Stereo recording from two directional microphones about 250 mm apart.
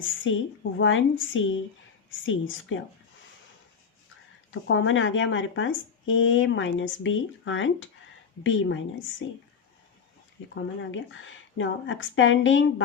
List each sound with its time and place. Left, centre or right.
0.3 s speech: left
4.5 s speech: left
10.5 s speech: left